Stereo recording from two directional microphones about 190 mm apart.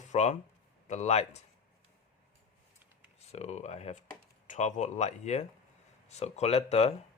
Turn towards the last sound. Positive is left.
turn(degrees=35)  # may be behind; listen again after turning